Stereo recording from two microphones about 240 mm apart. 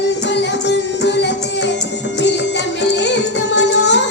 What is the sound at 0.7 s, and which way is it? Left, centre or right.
Music, left.